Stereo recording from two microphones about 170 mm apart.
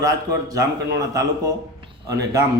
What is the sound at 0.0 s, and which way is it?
Speech, 20° right (ahead or behind).